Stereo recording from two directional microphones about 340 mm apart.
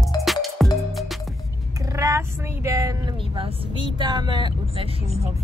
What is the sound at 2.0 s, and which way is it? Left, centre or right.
Vehicle, centre.